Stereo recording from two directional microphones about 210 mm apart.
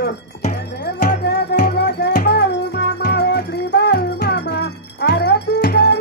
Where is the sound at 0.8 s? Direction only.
50° left (ahead or behind).